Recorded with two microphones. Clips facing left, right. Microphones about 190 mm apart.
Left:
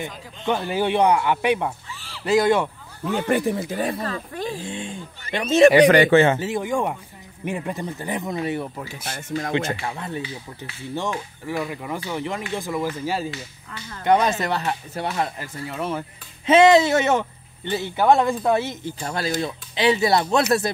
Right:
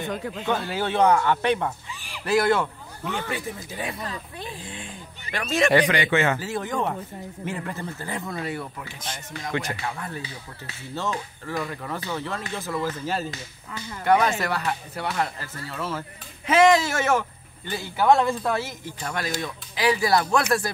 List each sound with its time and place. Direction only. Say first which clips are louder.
0.5 s speech: left 5 dB; 15° left (ahead or behind)
2.0 s fowl: even; 15° right (ahead or behind)
2.2 s speech: left 3 dB; 15° left (ahead or behind)
3.3 s speech: left 10 dB; 65° left (ahead or behind)
3.7 s speech: left 7 dB; 40° left (ahead or behind)
4.6 s speech: left 7 dB; 25° left (ahead or behind)
5.9 s speech: left 9 dB; 40° left (ahead or behind)
6.2 s speech: left 5 dB; 25° left (ahead or behind)